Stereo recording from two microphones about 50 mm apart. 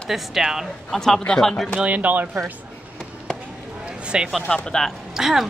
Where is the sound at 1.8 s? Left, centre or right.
Right.